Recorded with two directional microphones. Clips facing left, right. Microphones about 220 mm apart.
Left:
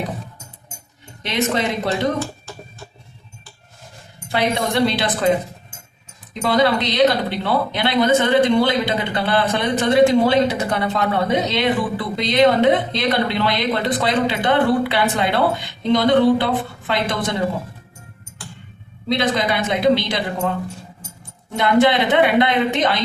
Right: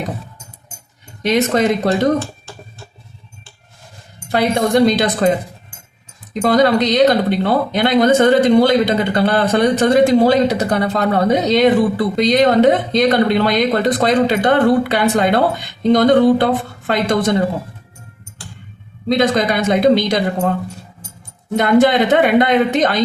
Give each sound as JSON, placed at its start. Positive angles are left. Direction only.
{"t": 1.2, "sound": "speech", "side_deg": -40}
{"t": 4.3, "sound": "speech", "side_deg": -45}
{"t": 6.4, "sound": "speech", "side_deg": -45}
{"t": 19.0, "sound": "speech", "side_deg": -45}
{"t": 21.5, "sound": "speech", "side_deg": -45}